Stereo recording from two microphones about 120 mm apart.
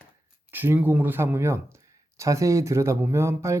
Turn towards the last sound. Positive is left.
turn(degrees=-25)  # may be behind; listen again after turning